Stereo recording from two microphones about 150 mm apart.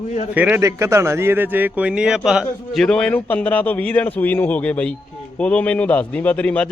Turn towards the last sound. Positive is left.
turn(degrees=10)  # may be behind; listen again after turning